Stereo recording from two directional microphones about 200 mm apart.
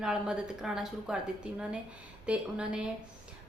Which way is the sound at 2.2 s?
5° right (ahead or behind).